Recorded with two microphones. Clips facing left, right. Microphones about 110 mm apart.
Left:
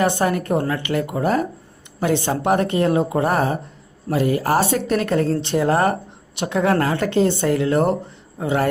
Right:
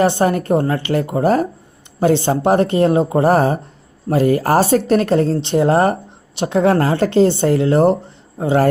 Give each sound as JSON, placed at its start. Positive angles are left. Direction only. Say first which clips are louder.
{"t": 0.0, "sound": "speech", "louder": "right 4 dB", "side_deg": -30}